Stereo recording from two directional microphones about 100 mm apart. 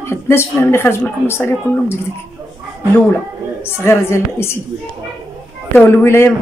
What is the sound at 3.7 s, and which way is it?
Speech, 25° left (ahead or behind).